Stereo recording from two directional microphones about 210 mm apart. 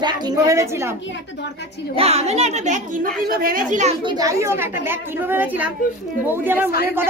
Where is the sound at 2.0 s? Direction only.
30° right (ahead or behind).